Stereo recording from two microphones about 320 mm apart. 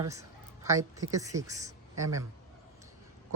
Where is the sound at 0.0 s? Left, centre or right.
Centre.